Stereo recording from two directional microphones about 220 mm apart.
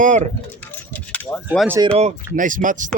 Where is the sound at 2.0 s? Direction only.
35° right (ahead or behind).